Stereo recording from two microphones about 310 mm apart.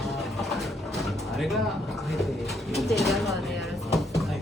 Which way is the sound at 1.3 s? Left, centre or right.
Centre.